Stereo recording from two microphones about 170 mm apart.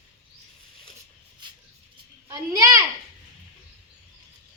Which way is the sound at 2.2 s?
20° right (ahead or behind).